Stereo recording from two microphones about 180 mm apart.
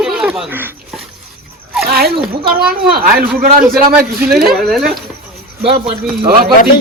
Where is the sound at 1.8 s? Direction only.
60° right (ahead or behind).